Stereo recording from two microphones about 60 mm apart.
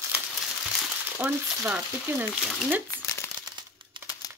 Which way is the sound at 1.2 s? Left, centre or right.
Right.